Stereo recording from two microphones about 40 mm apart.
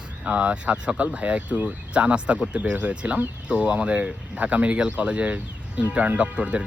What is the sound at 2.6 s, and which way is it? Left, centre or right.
Speech, right.